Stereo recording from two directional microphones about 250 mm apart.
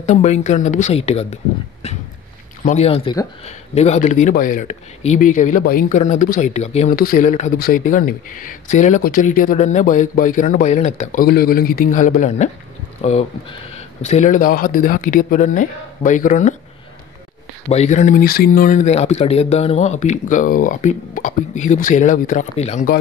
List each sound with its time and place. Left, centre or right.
0.0 s speech: left
17.6 s speech: left